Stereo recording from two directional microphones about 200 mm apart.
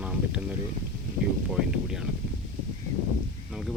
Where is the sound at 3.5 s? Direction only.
Centre (ahead or behind).